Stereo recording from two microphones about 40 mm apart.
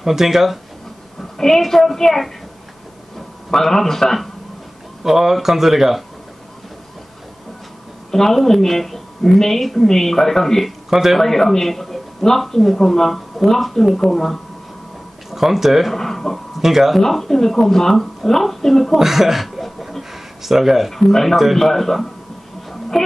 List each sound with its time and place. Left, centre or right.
0.0 s speech: centre
1.4 s a woman's voice: centre
3.4 s a woman's voice: centre
5.0 s speech: centre
8.1 s a woman's voice: centre
10.9 s speech: centre
11.1 s a woman's voice: centre
15.3 s speech: centre
15.9 s a sound: centre
16.5 s speech: centre
17.0 s a woman's voice: centre
18.9 s a sound: centre
20.9 s a woman's voice: centre
22.7 s music: centre